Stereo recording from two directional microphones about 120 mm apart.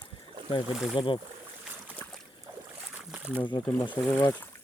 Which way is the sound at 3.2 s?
15° right (ahead or behind).